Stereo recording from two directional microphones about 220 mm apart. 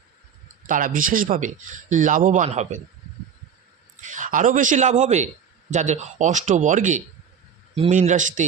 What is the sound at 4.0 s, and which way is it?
Speech, 35° right (ahead or behind).